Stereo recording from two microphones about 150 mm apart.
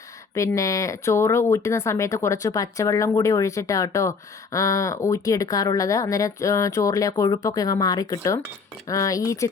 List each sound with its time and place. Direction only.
0.3 s speech: 20° left (ahead or behind)